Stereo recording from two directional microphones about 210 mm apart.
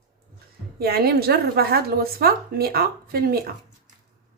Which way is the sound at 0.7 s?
45° right (ahead or behind).